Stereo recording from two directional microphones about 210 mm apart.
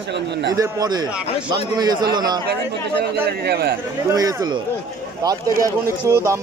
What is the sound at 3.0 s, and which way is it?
Speech, 50° right (ahead or behind).